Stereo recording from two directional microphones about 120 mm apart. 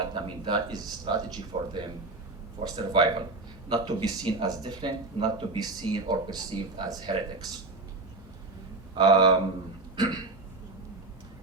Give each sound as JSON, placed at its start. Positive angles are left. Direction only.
{"t": 0.0, "sound": "speech", "side_deg": -40}
{"t": 1.5, "sound": "speech", "side_deg": -55}
{"t": 9.0, "sound": "speech", "side_deg": -40}
{"t": 9.9, "sound": "throat clearing", "side_deg": -40}